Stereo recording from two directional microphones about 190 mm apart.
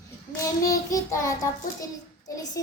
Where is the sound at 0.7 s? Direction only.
20° left (ahead or behind).